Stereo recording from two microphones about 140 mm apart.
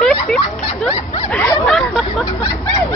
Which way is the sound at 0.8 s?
45° left (ahead or behind).